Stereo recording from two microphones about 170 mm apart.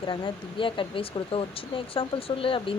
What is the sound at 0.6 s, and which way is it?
Speech, 30° left (ahead or behind).